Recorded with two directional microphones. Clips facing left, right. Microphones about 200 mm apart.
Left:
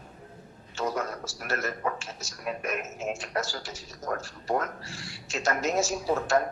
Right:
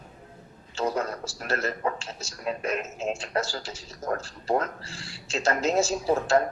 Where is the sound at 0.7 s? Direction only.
30° right (ahead or behind).